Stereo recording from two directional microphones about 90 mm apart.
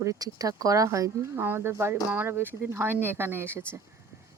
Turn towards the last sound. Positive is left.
turn(degrees=-25)  # may be behind; listen again after turning